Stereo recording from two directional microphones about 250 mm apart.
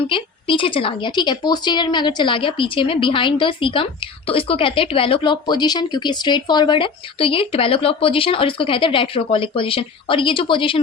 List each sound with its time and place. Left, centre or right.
0.1 s speech: left